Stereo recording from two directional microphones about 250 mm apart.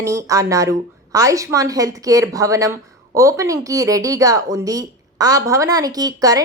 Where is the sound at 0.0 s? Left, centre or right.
Centre.